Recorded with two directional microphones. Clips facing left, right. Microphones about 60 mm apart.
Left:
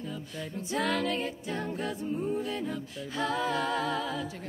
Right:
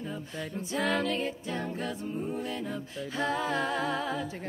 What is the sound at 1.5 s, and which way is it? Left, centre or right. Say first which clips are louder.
A capella: even; left.